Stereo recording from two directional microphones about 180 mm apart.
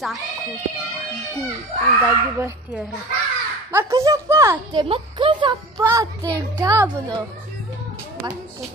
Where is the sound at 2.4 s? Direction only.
10° right (ahead or behind).